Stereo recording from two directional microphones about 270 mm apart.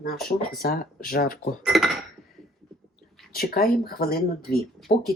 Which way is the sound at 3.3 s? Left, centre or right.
Left.